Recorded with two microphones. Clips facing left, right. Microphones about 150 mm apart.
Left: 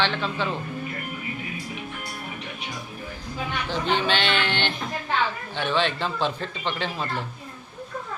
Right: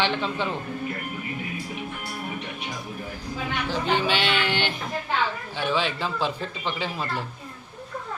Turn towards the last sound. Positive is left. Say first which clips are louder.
# even
turn(degrees=-5)  # may be behind; listen again after turning